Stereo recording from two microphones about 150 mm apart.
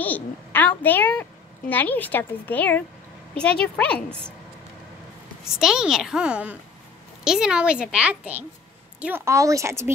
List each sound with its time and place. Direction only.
0.0 s a woman's voice: 10° left (ahead or behind)
5.4 s a woman's voice: 5° right (ahead or behind)